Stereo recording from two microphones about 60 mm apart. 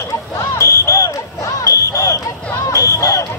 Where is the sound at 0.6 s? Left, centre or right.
Left.